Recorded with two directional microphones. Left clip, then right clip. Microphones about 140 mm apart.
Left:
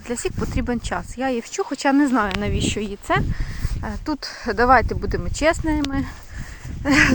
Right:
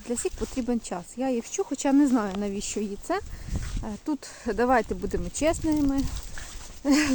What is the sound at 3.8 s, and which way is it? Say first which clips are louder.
A woman's voice: left 5 dB; 5° right (ahead or behind).